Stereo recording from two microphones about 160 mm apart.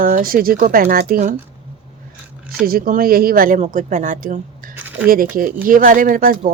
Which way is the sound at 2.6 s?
65° right (ahead or behind).